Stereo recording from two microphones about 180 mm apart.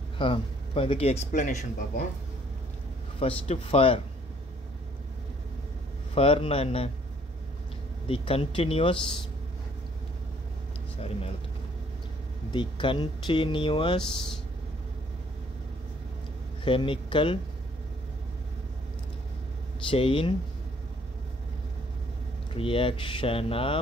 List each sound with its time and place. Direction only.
0.2 s speech: 30° left (ahead or behind)
3.2 s speech: 30° left (ahead or behind)
6.1 s speech: 30° left (ahead or behind)
8.1 s speech: 30° left (ahead or behind)
12.4 s speech: 25° left (ahead or behind)
16.6 s speech: 30° left (ahead or behind)
19.9 s speech: 30° left (ahead or behind)
22.5 s speech: 30° left (ahead or behind)